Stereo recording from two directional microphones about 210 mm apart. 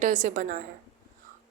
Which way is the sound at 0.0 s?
40° right (ahead or behind).